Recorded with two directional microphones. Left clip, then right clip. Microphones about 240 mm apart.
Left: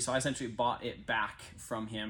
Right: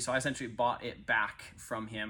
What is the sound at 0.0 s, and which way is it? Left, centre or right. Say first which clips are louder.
Speech: even; centre.